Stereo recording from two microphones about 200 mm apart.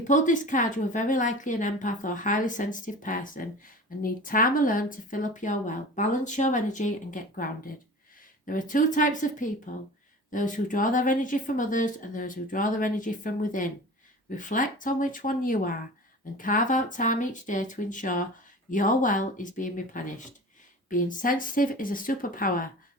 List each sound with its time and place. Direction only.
0.1 s speech: 40° left (ahead or behind)